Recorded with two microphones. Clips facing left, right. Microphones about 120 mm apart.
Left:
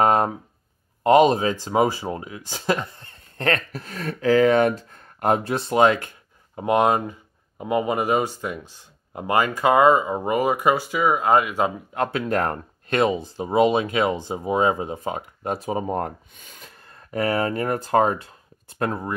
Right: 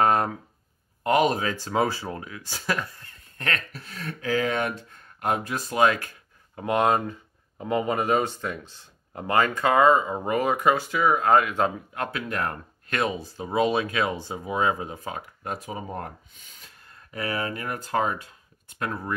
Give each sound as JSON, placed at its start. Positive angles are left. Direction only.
{"t": 0.0, "sound": "a sound", "side_deg": 20}
{"t": 1.0, "sound": "speech", "side_deg": 20}
{"t": 11.9, "sound": "speech", "side_deg": 30}
{"t": 12.9, "sound": "speech", "side_deg": 20}
{"t": 17.1, "sound": "speech", "side_deg": 35}